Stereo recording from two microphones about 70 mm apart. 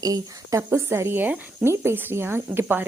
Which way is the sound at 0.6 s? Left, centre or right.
Right.